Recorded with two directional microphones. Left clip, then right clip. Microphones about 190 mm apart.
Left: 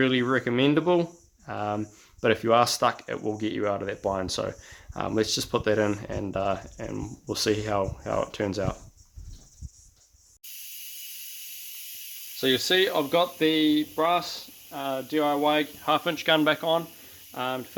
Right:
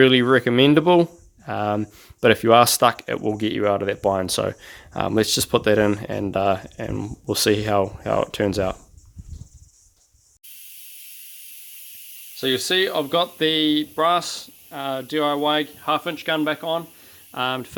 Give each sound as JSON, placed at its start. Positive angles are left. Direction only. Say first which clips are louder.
{"t": 0.0, "sound": "speech", "louder": "right 9 dB", "side_deg": -40}
{"t": 12.4, "sound": "speech", "louder": "right 2 dB", "side_deg": -15}
{"t": 15.8, "sound": "speech", "louder": "right 2 dB", "side_deg": -10}
{"t": 17.3, "sound": "speech", "louder": "right 6 dB", "side_deg": -30}